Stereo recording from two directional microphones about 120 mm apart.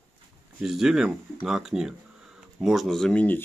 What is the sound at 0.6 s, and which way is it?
Speech, 5° right (ahead or behind).